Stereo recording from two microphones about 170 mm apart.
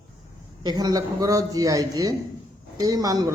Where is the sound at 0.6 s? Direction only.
25° right (ahead or behind).